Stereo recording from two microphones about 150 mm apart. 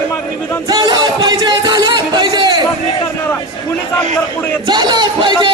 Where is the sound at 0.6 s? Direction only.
30° right (ahead or behind).